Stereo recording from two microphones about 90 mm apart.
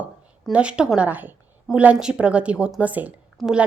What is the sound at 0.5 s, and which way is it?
A woman's voice, 10° right (ahead or behind).